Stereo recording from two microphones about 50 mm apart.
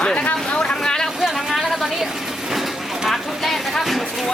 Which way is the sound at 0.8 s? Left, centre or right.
Centre.